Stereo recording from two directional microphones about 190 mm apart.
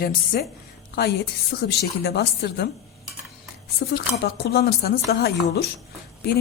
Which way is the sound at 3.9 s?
55° left (ahead or behind).